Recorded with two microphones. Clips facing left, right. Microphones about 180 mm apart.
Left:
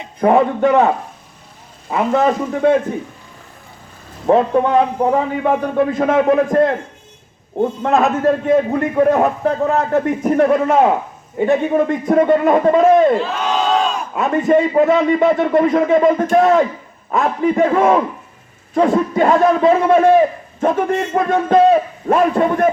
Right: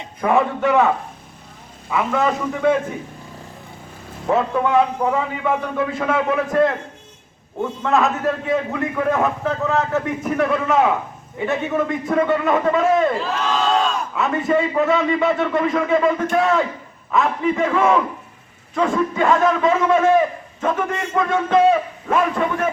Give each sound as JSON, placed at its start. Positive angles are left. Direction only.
{"t": 0.2, "sound": "a man's voice", "side_deg": 35}
{"t": 4.3, "sound": "a man's voice", "side_deg": 40}